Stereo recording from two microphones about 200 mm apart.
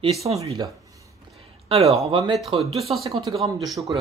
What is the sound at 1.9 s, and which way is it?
Speech, 30° right (ahead or behind).